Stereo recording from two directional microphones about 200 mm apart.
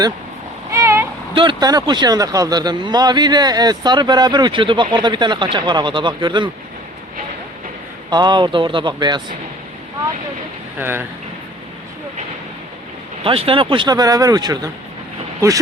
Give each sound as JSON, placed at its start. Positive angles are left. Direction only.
{"t": 0.7, "sound": "a sound", "side_deg": -15}
{"t": 1.4, "sound": "speech", "side_deg": -20}
{"t": 8.1, "sound": "speech", "side_deg": -20}
{"t": 10.8, "sound": "speech", "side_deg": -10}
{"t": 13.2, "sound": "speech", "side_deg": -30}